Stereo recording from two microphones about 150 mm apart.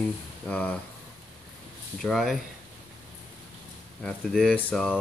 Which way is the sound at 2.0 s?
Centre (ahead or behind).